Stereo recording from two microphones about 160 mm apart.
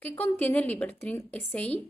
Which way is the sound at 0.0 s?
10° left (ahead or behind).